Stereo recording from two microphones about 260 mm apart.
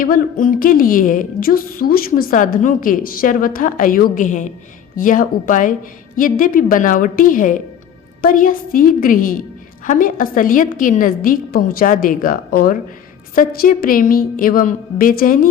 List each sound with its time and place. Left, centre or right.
0.0 s a woman's voice: left